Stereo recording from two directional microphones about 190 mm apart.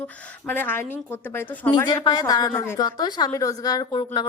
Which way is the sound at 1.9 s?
20° left (ahead or behind).